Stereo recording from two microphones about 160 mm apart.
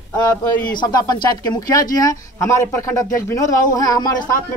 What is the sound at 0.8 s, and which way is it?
Speech, 25° left (ahead or behind).